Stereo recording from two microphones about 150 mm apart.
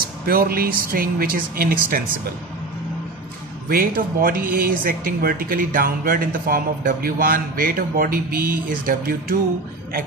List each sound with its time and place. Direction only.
0.3 s speech: 80° right
3.6 s speech: 75° right (ahead or behind)